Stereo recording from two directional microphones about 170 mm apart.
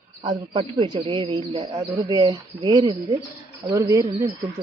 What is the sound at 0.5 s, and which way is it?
Speech, 30° right (ahead or behind).